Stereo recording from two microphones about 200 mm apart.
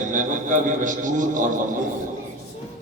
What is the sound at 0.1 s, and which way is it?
A man's voice, 40° right (ahead or behind).